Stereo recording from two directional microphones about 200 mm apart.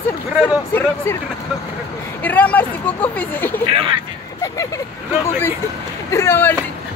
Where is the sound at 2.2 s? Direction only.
10° left (ahead or behind).